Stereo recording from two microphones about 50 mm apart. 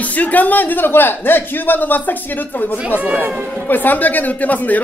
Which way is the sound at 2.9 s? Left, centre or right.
Right.